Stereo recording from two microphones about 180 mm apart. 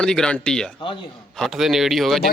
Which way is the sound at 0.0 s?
5° left (ahead or behind).